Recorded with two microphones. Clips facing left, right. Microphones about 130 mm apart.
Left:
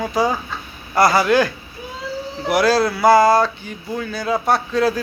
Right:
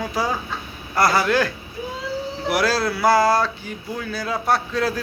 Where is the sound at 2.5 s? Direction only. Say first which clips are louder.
Left 5 dB; centre (ahead or behind).